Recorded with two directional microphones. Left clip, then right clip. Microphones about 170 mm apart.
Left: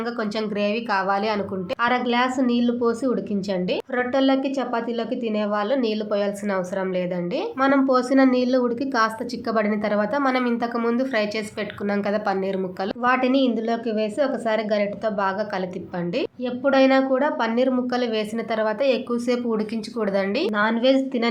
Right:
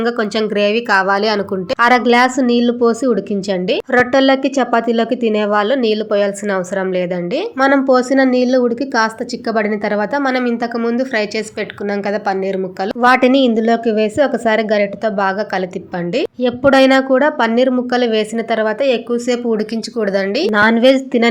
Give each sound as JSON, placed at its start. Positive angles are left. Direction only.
{"t": 0.0, "sound": "speech", "side_deg": -30}
{"t": 13.0, "sound": "speech", "side_deg": -40}
{"t": 16.4, "sound": "speech", "side_deg": -40}
{"t": 20.5, "sound": "speech", "side_deg": -40}